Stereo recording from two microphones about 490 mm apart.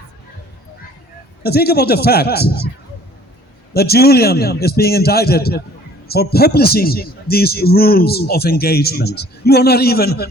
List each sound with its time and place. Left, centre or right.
1.4 s a man's voice: centre
3.8 s a man's voice: centre